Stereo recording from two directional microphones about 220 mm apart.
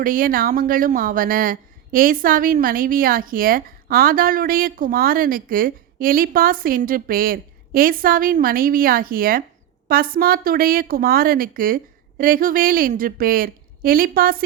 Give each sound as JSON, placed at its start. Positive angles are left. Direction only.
{"t": 0.0, "sound": "speech", "side_deg": -40}